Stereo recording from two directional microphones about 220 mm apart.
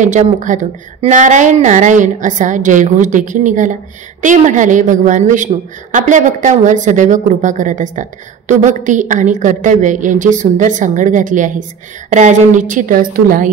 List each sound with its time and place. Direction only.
0.0 s a man's voice: 35° right (ahead or behind)